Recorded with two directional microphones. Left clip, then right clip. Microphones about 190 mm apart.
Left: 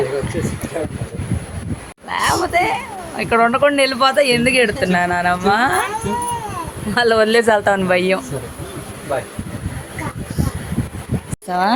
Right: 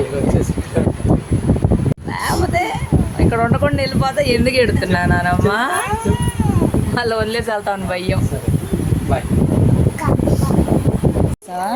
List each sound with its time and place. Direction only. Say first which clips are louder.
2.2 s a sound: left 2 dB; 15° left (ahead or behind)
3.2 s speech: left 4 dB; 15° left (ahead or behind)
6.9 s speech: left 9 dB; 15° left (ahead or behind)